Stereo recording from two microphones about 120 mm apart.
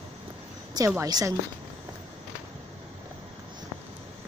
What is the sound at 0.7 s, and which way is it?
Speech, 30° right (ahead or behind).